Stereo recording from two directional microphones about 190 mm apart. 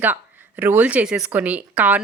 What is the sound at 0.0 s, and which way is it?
Speech, 10° right (ahead or behind).